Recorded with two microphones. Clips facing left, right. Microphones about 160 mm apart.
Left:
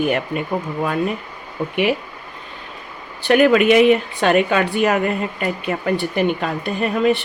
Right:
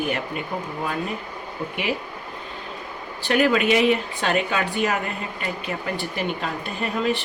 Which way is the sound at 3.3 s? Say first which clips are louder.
Left 6 dB; 60° left (ahead or behind).